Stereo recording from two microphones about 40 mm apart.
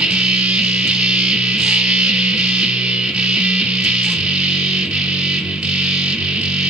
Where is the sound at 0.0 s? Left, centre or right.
Right.